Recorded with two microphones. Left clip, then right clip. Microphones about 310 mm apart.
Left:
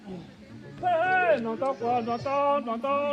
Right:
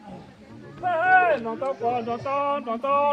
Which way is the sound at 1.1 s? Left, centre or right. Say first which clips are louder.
Right 7 dB; right.